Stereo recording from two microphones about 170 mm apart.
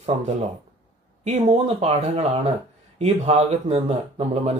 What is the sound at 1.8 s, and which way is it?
Speech, 35° right (ahead or behind).